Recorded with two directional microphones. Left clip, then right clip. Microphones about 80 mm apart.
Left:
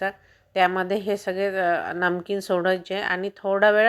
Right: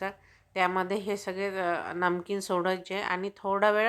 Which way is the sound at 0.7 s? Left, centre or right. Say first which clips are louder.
Left 5 dB; left.